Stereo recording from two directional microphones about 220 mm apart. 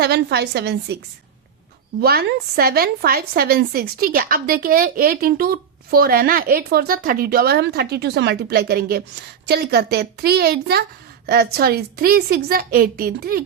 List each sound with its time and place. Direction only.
0.0 s speech: 45° right (ahead or behind)
2.0 s speech: 45° right (ahead or behind)